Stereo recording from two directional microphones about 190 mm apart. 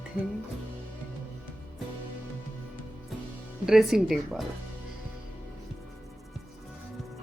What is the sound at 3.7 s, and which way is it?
Speech, centre (ahead or behind).